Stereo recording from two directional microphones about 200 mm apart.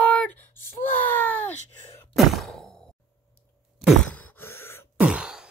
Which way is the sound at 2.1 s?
Centre (ahead or behind).